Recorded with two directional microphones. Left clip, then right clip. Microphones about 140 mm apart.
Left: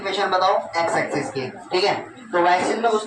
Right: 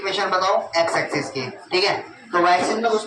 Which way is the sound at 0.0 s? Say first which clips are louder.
Even; 65° right (ahead or behind).